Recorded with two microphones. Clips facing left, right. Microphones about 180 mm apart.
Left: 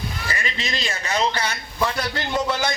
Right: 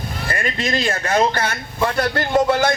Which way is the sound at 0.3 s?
55° right (ahead or behind).